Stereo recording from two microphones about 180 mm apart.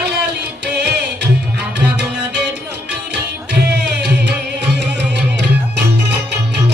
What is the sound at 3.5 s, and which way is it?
Music, 70° right (ahead or behind).